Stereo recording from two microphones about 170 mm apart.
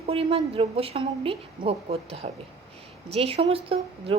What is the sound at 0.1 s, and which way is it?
A woman's voice, 35° right (ahead or behind).